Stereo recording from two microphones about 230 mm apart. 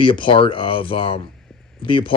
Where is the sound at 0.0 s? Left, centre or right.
Left.